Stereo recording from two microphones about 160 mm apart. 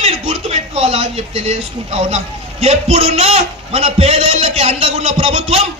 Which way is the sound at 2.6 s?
35° right (ahead or behind).